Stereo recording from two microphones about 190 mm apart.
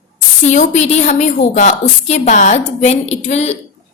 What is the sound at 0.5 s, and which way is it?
A woman's voice, 40° left (ahead or behind).